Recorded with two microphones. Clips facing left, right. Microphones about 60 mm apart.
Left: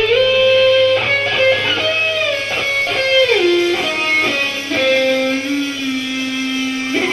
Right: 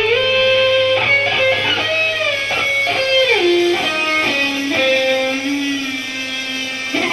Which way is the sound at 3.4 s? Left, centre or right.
Left.